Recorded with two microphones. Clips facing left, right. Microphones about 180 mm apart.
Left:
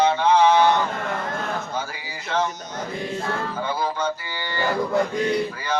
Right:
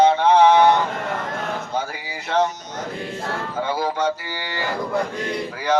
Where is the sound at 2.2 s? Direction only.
65° right (ahead or behind).